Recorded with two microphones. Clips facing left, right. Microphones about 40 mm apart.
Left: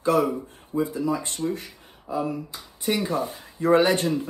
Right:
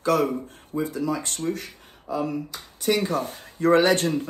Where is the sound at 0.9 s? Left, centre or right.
Left.